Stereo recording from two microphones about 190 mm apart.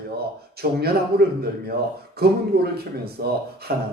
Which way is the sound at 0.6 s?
55° right (ahead or behind).